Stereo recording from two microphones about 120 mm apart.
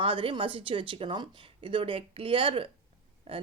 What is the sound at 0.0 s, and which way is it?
Speech, 45° right (ahead or behind).